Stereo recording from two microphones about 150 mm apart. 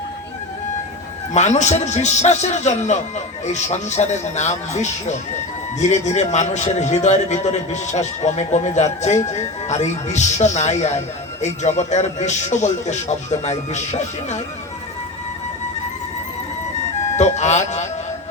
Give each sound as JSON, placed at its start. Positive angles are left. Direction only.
{"t": 1.3, "sound": "a man's voice", "side_deg": 50}
{"t": 17.2, "sound": "speech", "side_deg": 50}